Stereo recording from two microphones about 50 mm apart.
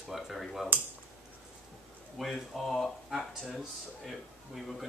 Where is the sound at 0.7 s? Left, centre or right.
Right.